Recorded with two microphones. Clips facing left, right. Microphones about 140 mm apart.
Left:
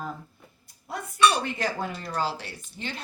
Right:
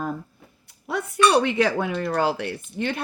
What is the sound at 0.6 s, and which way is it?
Speech, 75° right (ahead or behind).